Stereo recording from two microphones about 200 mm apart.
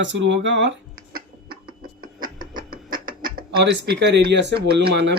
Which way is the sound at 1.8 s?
45° right (ahead or behind).